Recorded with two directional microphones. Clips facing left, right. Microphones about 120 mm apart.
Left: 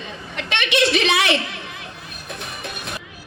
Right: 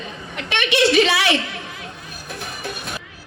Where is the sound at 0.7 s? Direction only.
20° left (ahead or behind).